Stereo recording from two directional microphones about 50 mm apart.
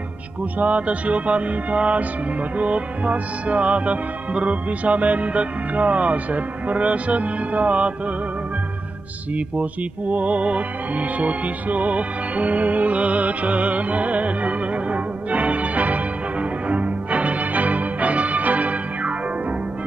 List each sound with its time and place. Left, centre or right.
0.6 s music: right
9.3 s music: right